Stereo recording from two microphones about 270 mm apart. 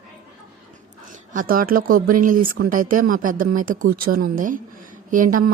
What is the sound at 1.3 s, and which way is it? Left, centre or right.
A woman's voice, right.